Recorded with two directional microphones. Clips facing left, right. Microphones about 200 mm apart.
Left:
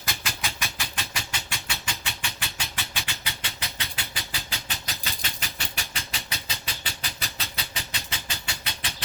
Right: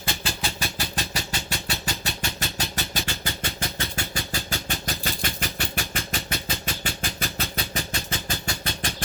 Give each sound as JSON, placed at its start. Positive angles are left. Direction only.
{"t": 0.0, "sound": "vehicle", "side_deg": -30}